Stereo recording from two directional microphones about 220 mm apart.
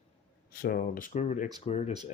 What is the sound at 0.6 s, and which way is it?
Speech, 40° left (ahead or behind).